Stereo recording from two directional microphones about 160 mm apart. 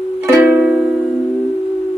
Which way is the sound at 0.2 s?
15° right (ahead or behind).